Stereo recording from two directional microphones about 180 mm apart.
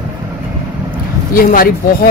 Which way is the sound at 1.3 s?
50° left (ahead or behind).